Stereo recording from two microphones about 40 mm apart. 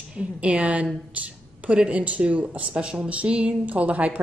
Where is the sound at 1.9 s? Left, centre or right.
Right.